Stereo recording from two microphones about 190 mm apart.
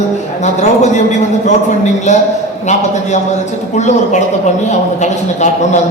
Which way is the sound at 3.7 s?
40° left (ahead or behind).